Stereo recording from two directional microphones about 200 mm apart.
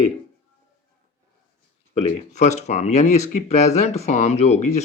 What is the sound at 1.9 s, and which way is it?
Speech, 35° left (ahead or behind).